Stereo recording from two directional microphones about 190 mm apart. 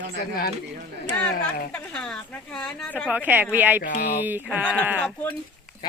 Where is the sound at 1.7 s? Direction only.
5° left (ahead or behind).